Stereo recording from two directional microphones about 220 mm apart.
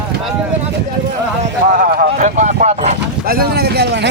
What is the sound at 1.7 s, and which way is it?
Speech, 40° right (ahead or behind).